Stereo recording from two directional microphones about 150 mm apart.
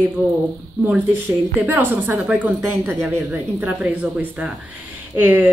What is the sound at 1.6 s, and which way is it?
Speech, 15° right (ahead or behind).